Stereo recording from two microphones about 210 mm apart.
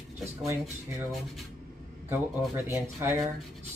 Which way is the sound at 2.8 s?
15° right (ahead or behind).